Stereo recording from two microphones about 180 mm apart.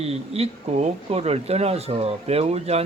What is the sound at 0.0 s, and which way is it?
Speech, 35° right (ahead or behind).